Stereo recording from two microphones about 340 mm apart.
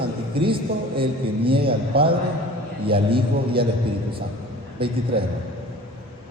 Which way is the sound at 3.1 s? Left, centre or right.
Right.